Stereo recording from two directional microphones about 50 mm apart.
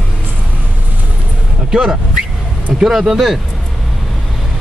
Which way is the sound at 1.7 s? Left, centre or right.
Centre.